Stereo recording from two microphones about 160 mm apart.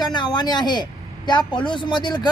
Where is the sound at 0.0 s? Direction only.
25° left (ahead or behind).